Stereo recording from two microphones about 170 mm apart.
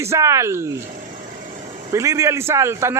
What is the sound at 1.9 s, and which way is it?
A man's voice, 15° right (ahead or behind).